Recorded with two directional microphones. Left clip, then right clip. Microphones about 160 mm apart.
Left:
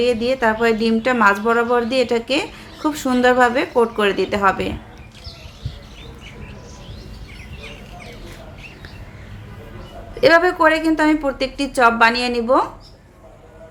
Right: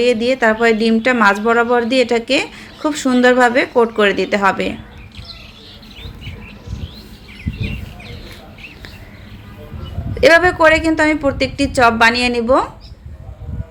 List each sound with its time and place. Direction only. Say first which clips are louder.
0.0 s speech: right 3 dB; 5° right (ahead or behind)
10.2 s speech: right 3 dB; 5° right (ahead or behind)